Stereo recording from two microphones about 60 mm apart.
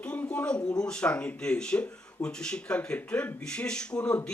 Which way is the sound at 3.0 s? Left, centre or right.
Left.